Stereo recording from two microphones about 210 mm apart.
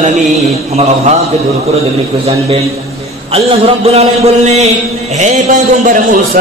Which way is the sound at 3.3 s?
30° right (ahead or behind).